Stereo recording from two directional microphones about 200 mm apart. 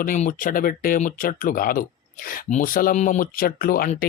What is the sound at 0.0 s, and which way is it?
Speech, 40° left (ahead or behind).